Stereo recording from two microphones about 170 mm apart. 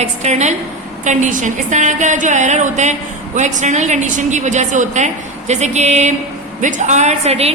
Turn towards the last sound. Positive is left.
turn(degrees=-40)  # may be behind; listen again after turning